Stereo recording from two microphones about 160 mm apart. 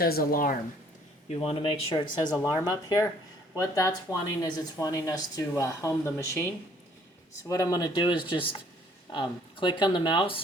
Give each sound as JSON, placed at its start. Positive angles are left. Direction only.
{"t": 0.0, "sound": "speech", "side_deg": 65}
{"t": 1.3, "sound": "speech", "side_deg": 35}
{"t": 1.9, "sound": "speech", "side_deg": 20}